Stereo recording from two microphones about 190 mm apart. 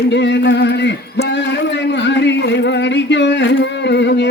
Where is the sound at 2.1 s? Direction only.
65° left (ahead or behind).